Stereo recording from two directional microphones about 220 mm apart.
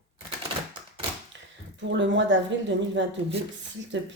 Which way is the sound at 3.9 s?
55° right (ahead or behind).